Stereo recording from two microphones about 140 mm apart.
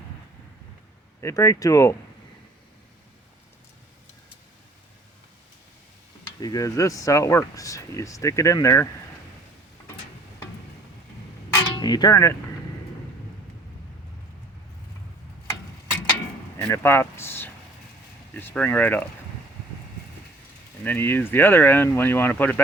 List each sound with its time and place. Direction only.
1.2 s speech: 20° left (ahead or behind)
6.4 s speech: 25° left (ahead or behind)
11.5 s a sound: 30° left (ahead or behind)
16.6 s a sound: 15° left (ahead or behind)
18.3 s speech: 15° left (ahead or behind)
20.8 s speech: 15° left (ahead or behind)